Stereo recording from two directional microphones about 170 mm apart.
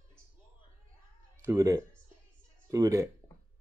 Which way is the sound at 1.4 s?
20° right (ahead or behind).